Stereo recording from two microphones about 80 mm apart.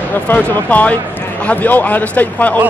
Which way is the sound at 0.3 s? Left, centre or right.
Centre.